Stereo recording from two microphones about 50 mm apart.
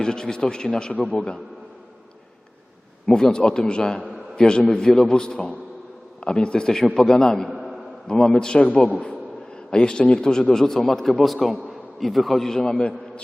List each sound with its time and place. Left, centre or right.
0.0 s a man's voice: centre
3.1 s a man's voice: centre
7.4 s a sound: centre
8.0 s a man's voice: centre